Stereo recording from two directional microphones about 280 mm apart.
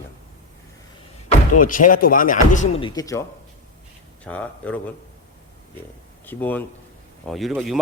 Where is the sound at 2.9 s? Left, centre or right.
Centre.